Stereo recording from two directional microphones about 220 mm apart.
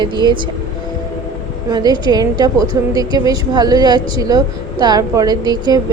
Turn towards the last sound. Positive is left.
turn(degrees=-20)  # may be behind; listen again after turning